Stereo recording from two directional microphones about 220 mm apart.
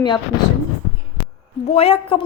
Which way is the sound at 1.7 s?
25° left (ahead or behind).